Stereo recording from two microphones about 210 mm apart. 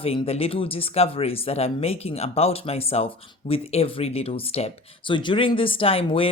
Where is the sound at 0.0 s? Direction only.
25° left (ahead or behind).